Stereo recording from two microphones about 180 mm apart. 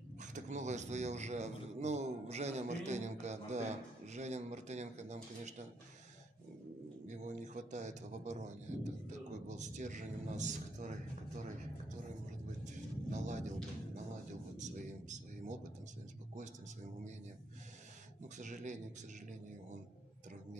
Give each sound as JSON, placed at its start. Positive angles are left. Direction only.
{"t": 0.2, "sound": "speech", "side_deg": -40}
{"t": 7.1, "sound": "speech", "side_deg": -45}
{"t": 12.6, "sound": "music", "side_deg": -40}
{"t": 14.6, "sound": "a sound", "side_deg": -40}
{"t": 18.4, "sound": "speech", "side_deg": -45}